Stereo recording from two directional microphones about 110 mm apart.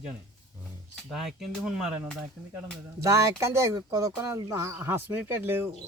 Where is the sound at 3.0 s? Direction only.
30° right (ahead or behind).